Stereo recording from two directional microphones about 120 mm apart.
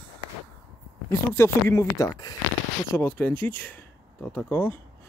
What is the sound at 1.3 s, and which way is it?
Speech, 20° left (ahead or behind).